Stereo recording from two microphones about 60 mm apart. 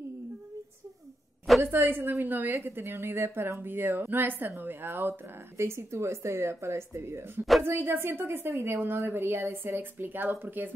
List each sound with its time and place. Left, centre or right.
1.6 s a woman's voice: right
5.6 s a woman's voice: right